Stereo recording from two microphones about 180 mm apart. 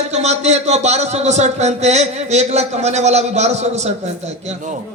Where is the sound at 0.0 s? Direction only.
40° right (ahead or behind).